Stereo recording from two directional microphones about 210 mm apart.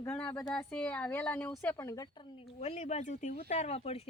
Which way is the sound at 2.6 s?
30° left (ahead or behind).